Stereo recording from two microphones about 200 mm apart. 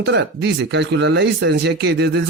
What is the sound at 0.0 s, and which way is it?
Speech, 60° right (ahead or behind).